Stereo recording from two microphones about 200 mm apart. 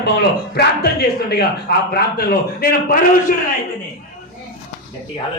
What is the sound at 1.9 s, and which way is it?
A man's voice, 50° left (ahead or behind).